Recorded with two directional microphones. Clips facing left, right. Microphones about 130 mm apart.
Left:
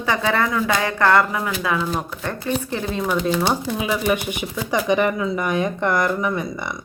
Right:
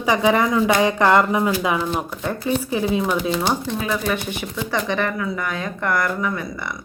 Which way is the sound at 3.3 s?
5° left (ahead or behind).